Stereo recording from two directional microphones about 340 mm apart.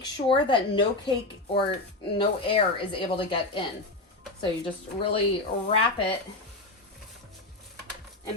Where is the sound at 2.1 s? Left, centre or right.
Centre.